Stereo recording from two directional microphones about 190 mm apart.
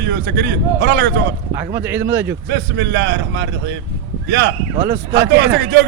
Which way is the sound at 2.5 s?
65° right (ahead or behind).